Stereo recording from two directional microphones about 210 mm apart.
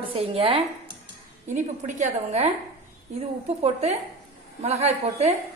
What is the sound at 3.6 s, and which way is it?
A woman's voice, 30° right (ahead or behind).